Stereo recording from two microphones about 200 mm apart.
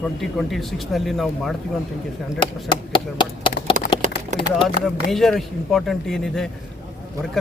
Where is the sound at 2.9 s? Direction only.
25° left (ahead or behind).